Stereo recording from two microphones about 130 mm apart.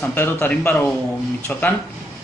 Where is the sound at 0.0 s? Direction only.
15° left (ahead or behind).